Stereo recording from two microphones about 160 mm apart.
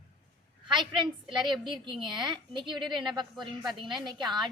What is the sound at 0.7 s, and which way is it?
A woman's voice, 30° right (ahead or behind).